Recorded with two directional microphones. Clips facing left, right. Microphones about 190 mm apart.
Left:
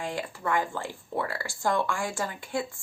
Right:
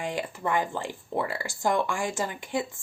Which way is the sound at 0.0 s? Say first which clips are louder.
Right 2 dB; 20° right (ahead or behind).